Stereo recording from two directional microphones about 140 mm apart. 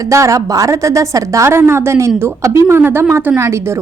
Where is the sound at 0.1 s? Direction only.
20° right (ahead or behind).